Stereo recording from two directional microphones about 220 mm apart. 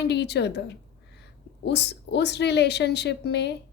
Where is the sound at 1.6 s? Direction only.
50° left (ahead or behind).